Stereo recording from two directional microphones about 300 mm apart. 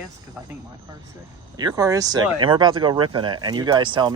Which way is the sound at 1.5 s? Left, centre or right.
Centre.